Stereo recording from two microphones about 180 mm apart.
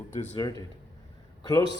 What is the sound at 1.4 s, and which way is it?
Speech, 20° left (ahead or behind).